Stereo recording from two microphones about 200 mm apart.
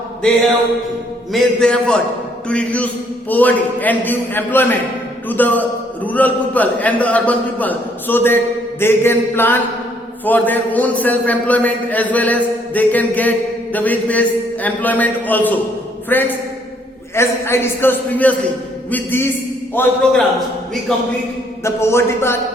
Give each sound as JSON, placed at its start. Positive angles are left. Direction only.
{"t": 1.3, "sound": "a man's voice", "side_deg": 0}